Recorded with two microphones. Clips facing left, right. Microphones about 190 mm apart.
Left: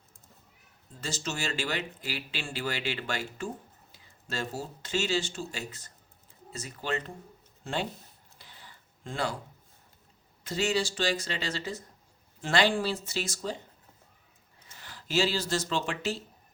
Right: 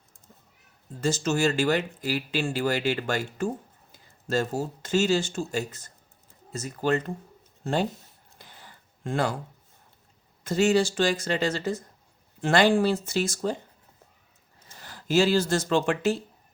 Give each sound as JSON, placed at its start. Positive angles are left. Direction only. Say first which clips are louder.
{"t": 1.0, "sound": "speech", "louder": "right 11 dB", "side_deg": -50}
{"t": 8.4, "sound": "a sound", "louder": "right 4 dB", "side_deg": -50}
{"t": 10.4, "sound": "speech", "louder": "right 7 dB", "side_deg": -50}
{"t": 14.8, "sound": "speech", "louder": "right 6 dB", "side_deg": -45}